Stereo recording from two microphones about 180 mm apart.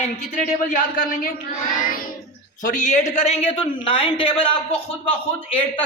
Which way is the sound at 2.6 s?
45° left (ahead or behind).